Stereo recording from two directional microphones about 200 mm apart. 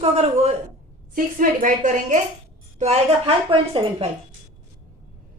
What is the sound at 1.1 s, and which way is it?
A woman's voice, 40° right (ahead or behind).